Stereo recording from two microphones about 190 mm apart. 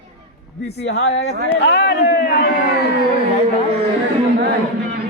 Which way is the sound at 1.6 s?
65° left (ahead or behind).